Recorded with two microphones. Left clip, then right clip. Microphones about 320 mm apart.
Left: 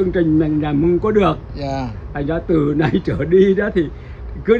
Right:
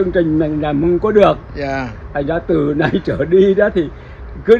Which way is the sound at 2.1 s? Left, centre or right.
Centre.